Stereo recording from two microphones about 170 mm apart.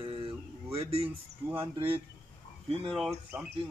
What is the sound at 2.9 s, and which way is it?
Speech, centre (ahead or behind).